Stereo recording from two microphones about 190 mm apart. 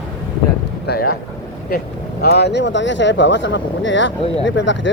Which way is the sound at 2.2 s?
60° left (ahead or behind).